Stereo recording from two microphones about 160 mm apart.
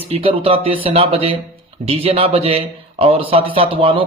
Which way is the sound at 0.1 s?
35° right (ahead or behind).